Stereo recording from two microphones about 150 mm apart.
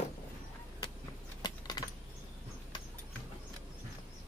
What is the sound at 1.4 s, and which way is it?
Typing, 25° left (ahead or behind).